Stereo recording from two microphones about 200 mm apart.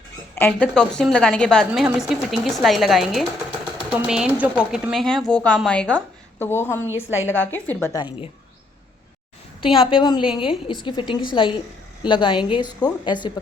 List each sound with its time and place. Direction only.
0.3 s a woman's voice: 5° left (ahead or behind)
9.9 s a woman's voice: 20° left (ahead or behind)